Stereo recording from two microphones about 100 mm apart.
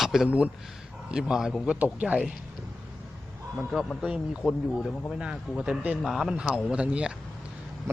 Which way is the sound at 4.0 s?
10° right (ahead or behind).